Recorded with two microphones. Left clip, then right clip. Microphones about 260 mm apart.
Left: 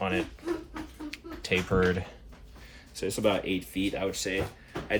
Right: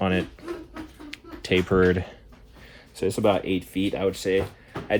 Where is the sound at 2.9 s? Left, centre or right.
Right.